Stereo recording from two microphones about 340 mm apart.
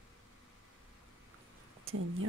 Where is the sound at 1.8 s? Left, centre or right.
Right.